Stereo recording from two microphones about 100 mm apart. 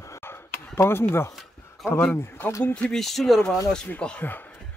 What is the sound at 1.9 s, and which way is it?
Speech, 20° left (ahead or behind).